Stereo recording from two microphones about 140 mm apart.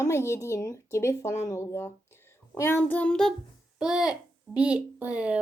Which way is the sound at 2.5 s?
15° left (ahead or behind).